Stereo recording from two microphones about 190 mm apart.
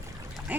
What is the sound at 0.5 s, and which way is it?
Speech, 10° right (ahead or behind).